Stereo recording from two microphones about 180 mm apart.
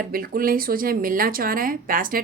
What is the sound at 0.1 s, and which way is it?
A woman's voice, 50° right (ahead or behind).